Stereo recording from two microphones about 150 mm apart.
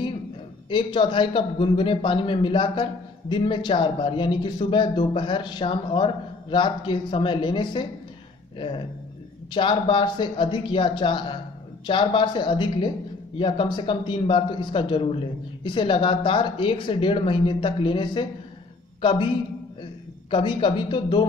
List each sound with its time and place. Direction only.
0.7 s a man's voice: 30° left (ahead or behind)